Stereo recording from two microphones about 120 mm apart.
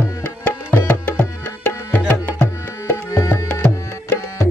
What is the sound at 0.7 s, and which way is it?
Tabla, 15° left (ahead or behind).